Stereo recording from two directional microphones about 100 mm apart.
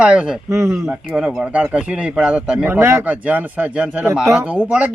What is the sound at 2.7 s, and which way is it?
Speech, 25° right (ahead or behind).